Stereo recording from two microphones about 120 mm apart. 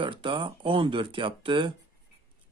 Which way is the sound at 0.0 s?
45° right (ahead or behind).